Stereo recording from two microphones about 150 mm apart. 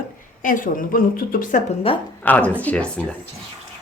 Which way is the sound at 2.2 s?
10° left (ahead or behind).